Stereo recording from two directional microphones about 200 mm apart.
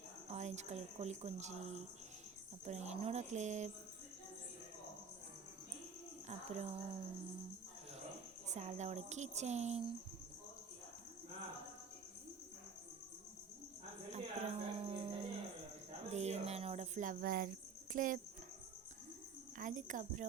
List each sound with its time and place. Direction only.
0.3 s speech: 35° right (ahead or behind)
6.2 s speech: 35° right (ahead or behind)
8.4 s speech: 35° right (ahead or behind)
14.1 s music: 30° right (ahead or behind)
16.0 s cricket: 35° right (ahead or behind)
17.9 s speech: 40° right (ahead or behind)
19.5 s speech: 40° right (ahead or behind)